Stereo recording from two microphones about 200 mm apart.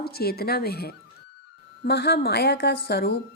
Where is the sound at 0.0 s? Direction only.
50° left (ahead or behind).